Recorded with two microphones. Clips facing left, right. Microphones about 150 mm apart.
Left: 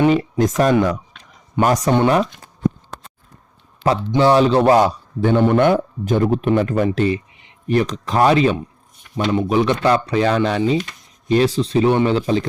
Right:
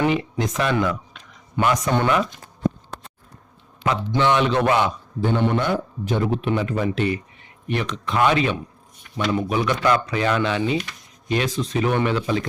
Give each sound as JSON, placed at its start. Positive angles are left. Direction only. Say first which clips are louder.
{"t": 0.1, "sound": "speech", "louder": "left 6 dB", "side_deg": 40}
{"t": 3.8, "sound": "a sound", "louder": "left 5 dB", "side_deg": -15}
{"t": 4.2, "sound": "speech", "louder": "left 6 dB", "side_deg": 35}
{"t": 5.2, "sound": "a man's voice", "louder": "left 7 dB", "side_deg": 55}